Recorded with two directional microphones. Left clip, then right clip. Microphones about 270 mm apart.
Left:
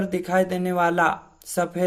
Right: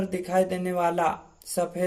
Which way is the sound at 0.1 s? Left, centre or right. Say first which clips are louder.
Left 2 dB; left.